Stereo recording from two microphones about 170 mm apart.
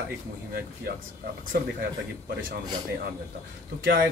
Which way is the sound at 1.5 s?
65° right (ahead or behind).